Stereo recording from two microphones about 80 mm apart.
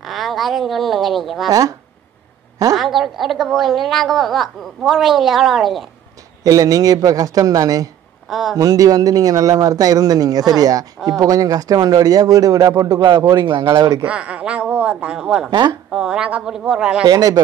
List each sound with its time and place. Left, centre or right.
0.0 s speech: centre
1.5 s speech: right
2.7 s a woman's voice: centre
6.4 s speech: right
8.3 s a woman's voice: centre
8.5 s speech: right
13.0 s a man's voice: right
13.7 s speech: right
14.0 s a woman's voice: centre
17.0 s speech: right